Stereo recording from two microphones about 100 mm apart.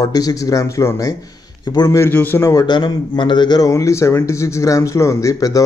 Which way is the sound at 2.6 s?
50° left (ahead or behind).